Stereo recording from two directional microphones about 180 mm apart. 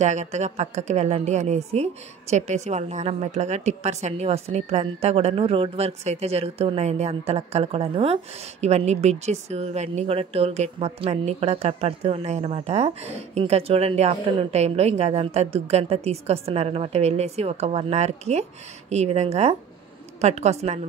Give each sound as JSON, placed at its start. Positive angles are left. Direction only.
{"t": 0.0, "sound": "a woman's voice", "side_deg": -40}